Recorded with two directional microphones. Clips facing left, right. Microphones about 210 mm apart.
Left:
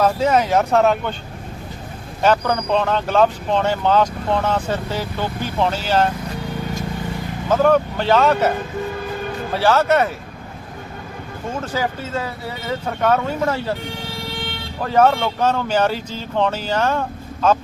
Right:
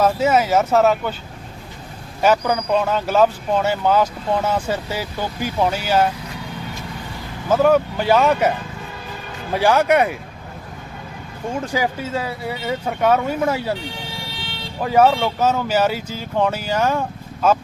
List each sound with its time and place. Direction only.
0.0 s speech: 5° right (ahead or behind)
2.2 s speech: 10° right (ahead or behind)
7.5 s speech: 10° right (ahead or behind)
9.6 s speech: 15° right (ahead or behind)
11.6 s speech: 15° right (ahead or behind)
14.8 s speech: 10° right (ahead or behind)